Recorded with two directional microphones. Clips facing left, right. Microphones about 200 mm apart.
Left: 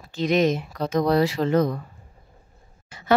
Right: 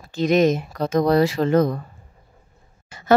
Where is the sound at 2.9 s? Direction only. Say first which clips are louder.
Right 4 dB; 45° right (ahead or behind).